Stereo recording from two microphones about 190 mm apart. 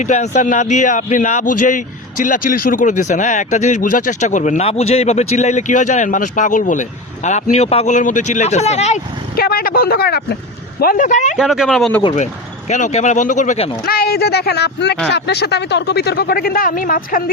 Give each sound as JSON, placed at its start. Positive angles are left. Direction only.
{"t": 0.0, "sound": "speech", "side_deg": 40}
{"t": 9.3, "sound": "speech", "side_deg": 55}
{"t": 11.3, "sound": "speech", "side_deg": 0}
{"t": 12.1, "sound": "speech", "side_deg": 40}
{"t": 13.8, "sound": "speech", "side_deg": 55}